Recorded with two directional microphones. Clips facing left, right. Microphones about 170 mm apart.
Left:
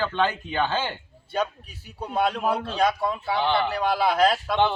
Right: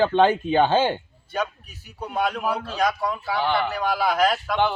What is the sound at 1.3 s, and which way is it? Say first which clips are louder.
Speech: left 1 dB; 30° left (ahead or behind).